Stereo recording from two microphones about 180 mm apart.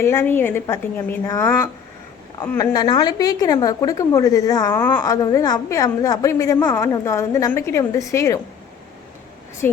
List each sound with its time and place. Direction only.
0.0 s a woman's voice: 15° left (ahead or behind)